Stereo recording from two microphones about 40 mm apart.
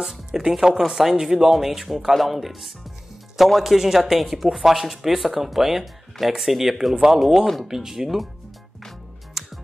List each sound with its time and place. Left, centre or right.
0.0 s music: centre
0.5 s speech: centre
9.4 s music: centre